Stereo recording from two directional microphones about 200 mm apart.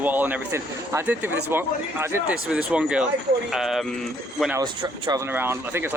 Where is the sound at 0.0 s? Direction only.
10° right (ahead or behind).